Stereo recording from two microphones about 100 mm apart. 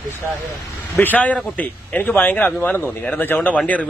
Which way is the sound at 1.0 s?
15° left (ahead or behind).